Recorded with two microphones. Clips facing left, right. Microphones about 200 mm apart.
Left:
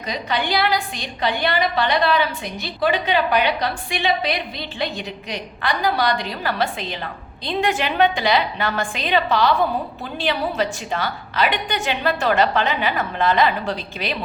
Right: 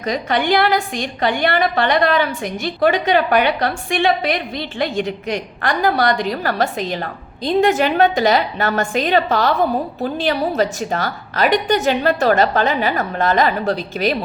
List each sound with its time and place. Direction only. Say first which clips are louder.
0.0 s a woman's voice: right 5 dB; 45° right (ahead or behind)